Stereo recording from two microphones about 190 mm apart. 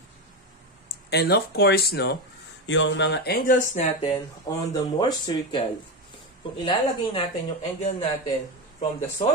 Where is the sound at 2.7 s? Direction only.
70° left (ahead or behind); by 3.6 s 50° left (ahead or behind).